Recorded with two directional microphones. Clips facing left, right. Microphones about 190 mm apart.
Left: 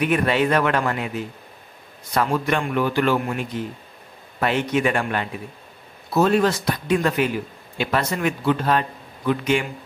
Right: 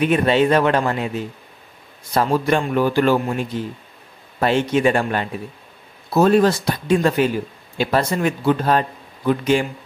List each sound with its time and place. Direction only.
0.0 s a man's voice: 25° right (ahead or behind)